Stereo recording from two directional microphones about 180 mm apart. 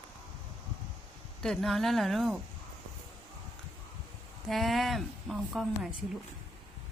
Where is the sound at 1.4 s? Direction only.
Centre (ahead or behind).